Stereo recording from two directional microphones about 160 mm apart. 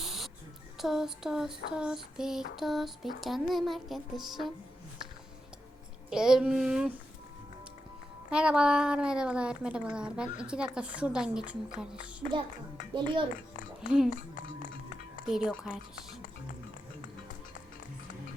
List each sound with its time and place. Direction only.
0.0 s a sound: centre (ahead or behind)
0.8 s speech: centre (ahead or behind)
6.1 s speech: 5° right (ahead or behind)
8.3 s speech: 5° right (ahead or behind)
12.9 s a child's voice: 30° right (ahead or behind)
13.8 s speech: 5° right (ahead or behind)
15.3 s speech: 5° right (ahead or behind)